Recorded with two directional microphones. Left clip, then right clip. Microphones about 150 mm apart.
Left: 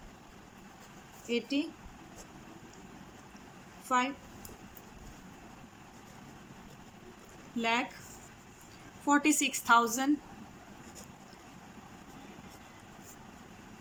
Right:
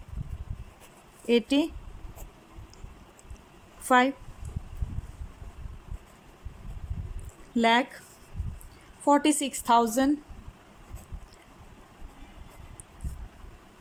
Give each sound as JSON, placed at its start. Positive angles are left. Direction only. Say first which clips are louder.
{"t": 1.3, "sound": "speech", "louder": "right 9 dB", "side_deg": -65}
{"t": 3.8, "sound": "speech", "louder": "right 8 dB", "side_deg": -55}
{"t": 7.6, "sound": "speech", "louder": "right 8 dB", "side_deg": -50}
{"t": 9.0, "sound": "a woman's voice", "louder": "right 5 dB", "side_deg": -35}